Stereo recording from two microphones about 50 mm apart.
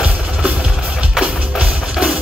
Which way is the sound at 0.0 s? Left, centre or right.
Right.